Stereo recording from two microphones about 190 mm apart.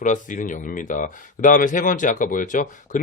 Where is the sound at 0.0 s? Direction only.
45° left (ahead or behind).